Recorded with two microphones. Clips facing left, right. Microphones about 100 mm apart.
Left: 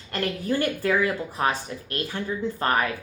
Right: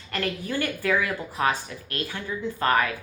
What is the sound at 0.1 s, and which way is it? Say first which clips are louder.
A woman's voice: left 3 dB; 30° left (ahead or behind).